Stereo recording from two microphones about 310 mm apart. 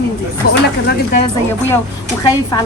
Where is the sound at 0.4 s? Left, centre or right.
Left.